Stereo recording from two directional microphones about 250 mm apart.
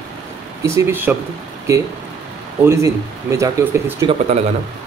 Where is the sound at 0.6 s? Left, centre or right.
Centre.